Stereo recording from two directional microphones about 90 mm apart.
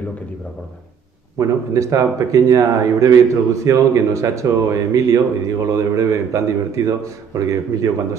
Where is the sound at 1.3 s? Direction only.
35° right (ahead or behind).